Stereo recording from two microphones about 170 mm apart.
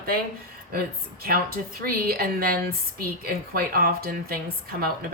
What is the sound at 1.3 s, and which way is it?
Speech, 60° right (ahead or behind).